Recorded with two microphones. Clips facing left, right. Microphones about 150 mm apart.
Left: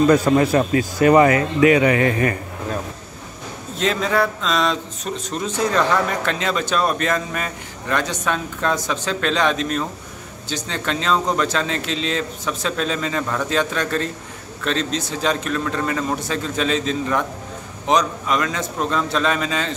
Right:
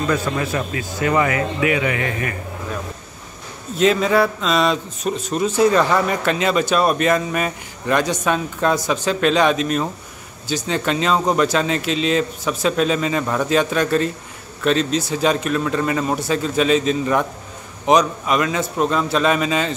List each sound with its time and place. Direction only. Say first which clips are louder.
0.1 s speech: left 6 dB; 40° left (ahead or behind)
3.7 s speech: right 4 dB; 5° right (ahead or behind)